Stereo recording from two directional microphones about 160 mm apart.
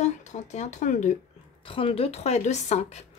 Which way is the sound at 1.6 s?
35° left (ahead or behind).